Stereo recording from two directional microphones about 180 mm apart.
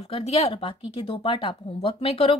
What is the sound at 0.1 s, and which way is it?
Speech, 30° left (ahead or behind).